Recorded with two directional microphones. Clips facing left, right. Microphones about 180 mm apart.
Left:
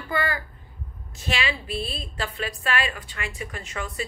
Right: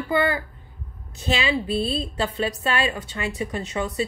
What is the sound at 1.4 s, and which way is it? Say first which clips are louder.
A woman's voice: right 7 dB; 25° right (ahead or behind).